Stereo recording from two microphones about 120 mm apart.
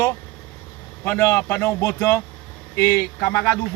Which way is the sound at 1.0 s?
20° left (ahead or behind).